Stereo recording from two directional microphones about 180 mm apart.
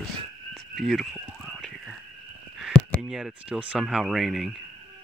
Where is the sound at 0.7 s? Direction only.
Centre (ahead or behind).